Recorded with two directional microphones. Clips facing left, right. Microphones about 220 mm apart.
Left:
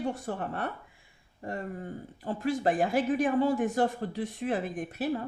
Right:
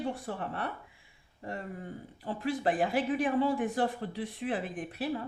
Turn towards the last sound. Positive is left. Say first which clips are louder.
# left 3 dB
turn(degrees=45)  # may be behind; listen again after turning